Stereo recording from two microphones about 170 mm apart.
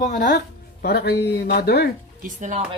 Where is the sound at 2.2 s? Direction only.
45° right (ahead or behind).